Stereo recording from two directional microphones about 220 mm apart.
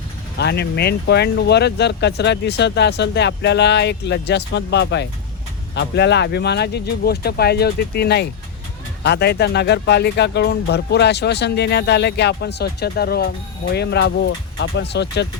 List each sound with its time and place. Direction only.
0.3 s speech: 50° left (ahead or behind)